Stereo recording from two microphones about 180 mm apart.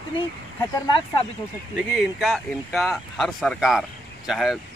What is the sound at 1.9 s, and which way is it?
Speech, 5° right (ahead or behind).